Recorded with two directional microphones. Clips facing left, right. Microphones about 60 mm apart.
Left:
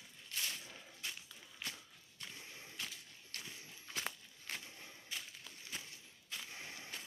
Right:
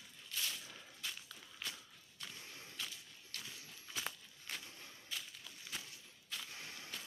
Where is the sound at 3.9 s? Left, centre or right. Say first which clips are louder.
Left 1 dB; left.